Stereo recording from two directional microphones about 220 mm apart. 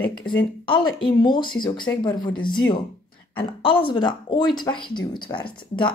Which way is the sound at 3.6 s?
20° left (ahead or behind).